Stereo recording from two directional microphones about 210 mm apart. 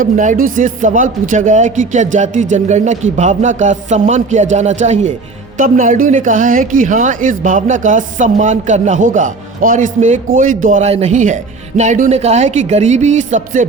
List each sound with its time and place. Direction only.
0.0 s speech: 40° right (ahead or behind)